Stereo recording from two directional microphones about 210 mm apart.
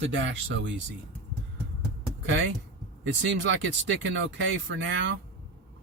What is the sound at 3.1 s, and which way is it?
Speech, 60° right (ahead or behind).